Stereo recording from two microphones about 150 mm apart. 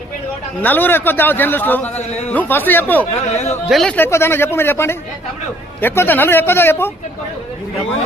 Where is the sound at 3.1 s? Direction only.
45° left (ahead or behind).